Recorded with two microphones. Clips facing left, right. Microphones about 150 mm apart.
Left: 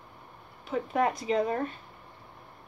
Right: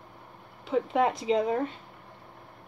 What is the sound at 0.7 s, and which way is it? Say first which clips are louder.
Speech: right 2 dB; 25° right (ahead or behind).